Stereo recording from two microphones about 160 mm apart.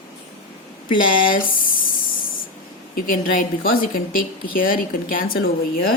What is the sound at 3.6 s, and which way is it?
Speech, 60° left (ahead or behind).